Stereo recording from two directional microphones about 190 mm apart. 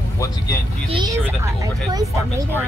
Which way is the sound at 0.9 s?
20° right (ahead or behind).